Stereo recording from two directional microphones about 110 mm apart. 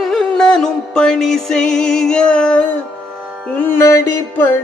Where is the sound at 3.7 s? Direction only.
25° left (ahead or behind).